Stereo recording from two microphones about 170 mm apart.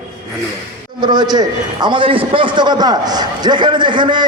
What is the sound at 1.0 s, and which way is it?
A man's voice, 25° right (ahead or behind).